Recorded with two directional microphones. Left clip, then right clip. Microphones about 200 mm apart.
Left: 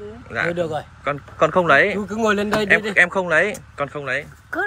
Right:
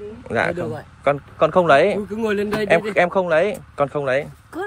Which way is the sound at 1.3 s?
10° right (ahead or behind).